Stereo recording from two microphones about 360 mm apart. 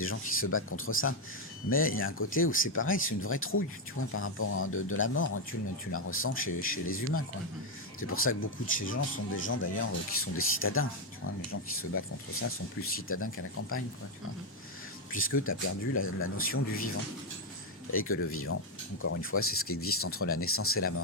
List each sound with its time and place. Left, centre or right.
0.0 s speech: left
15.1 s speech: left
17.9 s speech: left